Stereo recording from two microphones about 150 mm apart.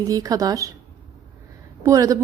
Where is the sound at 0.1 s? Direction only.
25° right (ahead or behind).